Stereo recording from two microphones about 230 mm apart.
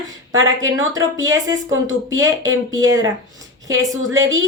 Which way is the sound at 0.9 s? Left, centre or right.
Centre.